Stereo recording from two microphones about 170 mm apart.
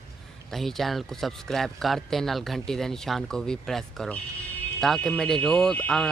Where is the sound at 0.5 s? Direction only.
Centre (ahead or behind).